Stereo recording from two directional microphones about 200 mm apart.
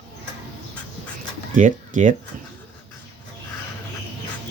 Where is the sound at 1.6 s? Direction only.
40° right (ahead or behind).